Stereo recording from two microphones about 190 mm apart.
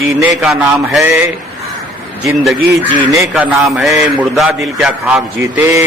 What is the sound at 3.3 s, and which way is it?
A man's voice, centre (ahead or behind).